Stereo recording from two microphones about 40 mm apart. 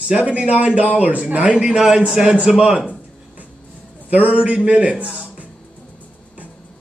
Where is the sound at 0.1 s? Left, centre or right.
Right.